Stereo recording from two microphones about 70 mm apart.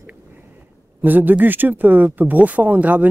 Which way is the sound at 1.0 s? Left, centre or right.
Right.